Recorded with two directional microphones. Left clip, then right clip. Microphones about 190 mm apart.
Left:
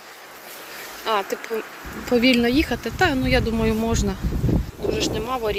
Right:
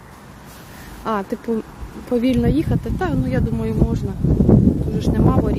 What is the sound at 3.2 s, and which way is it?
Speech, 5° right (ahead or behind).